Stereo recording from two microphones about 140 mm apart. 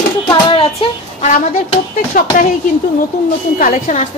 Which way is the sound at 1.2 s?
60° left (ahead or behind).